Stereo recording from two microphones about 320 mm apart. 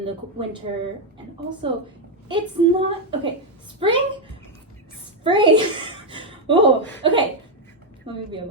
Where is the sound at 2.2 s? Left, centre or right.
Centre.